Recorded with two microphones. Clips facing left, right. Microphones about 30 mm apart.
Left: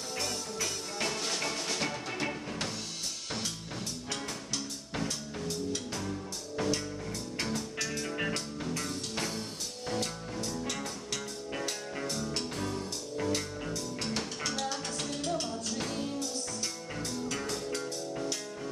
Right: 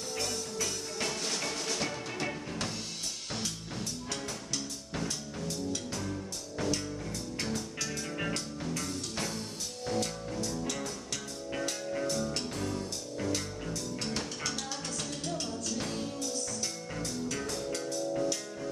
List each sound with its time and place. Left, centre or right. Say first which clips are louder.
0.1 s music: even; centre
4.9 s music: left 1 dB; centre
11.9 s music: right 3 dB; centre